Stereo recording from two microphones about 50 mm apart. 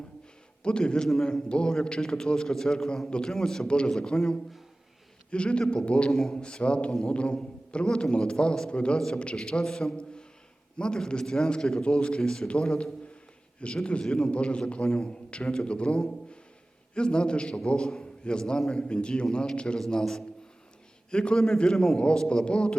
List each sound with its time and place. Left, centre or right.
0.6 s a man's voice: centre
6.1 s a man's voice: centre
6.3 s a man's voice: left